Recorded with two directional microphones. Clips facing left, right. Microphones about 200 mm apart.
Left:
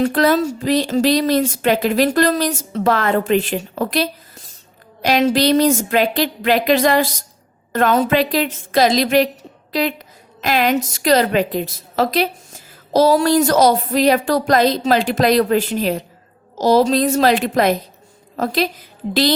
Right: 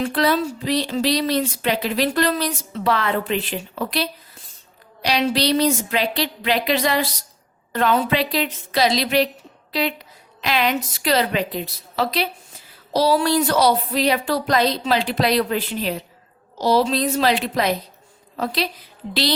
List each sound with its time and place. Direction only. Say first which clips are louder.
0.0 s a woman's voice: left 5 dB; 45° left (ahead or behind)
10.4 s a woman's voice: left 4 dB; 45° left (ahead or behind)